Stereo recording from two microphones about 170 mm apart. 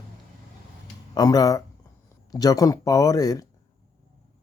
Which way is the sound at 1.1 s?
20° left (ahead or behind).